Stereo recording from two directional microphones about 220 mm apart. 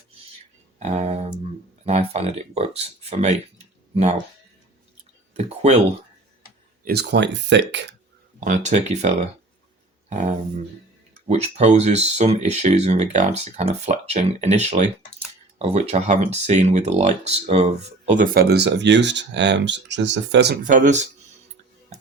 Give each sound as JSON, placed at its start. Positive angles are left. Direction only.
{"t": 0.8, "sound": "speech", "side_deg": -30}
{"t": 5.3, "sound": "speech", "side_deg": -30}
{"t": 6.8, "sound": "speech", "side_deg": -50}
{"t": 8.4, "sound": "speech", "side_deg": -30}
{"t": 11.3, "sound": "speech", "side_deg": -30}
{"t": 20.7, "sound": "speech", "side_deg": -35}